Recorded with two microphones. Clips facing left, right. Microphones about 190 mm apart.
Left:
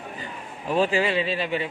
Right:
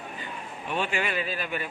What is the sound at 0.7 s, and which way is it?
Speech, 35° left (ahead or behind).